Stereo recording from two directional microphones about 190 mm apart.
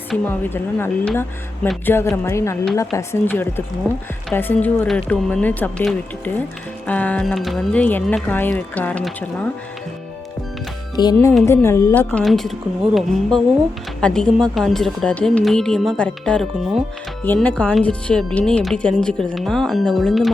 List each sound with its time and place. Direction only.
0.1 s speech: 10° left (ahead or behind)
1.6 s speech: centre (ahead or behind)
1.9 s speech: 15° left (ahead or behind)
3.9 s speech: centre (ahead or behind)
10.9 s music: 20° left (ahead or behind)
11.4 s speech: 15° left (ahead or behind)